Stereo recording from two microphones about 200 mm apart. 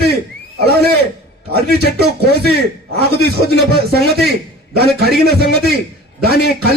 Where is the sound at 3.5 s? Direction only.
55° right (ahead or behind).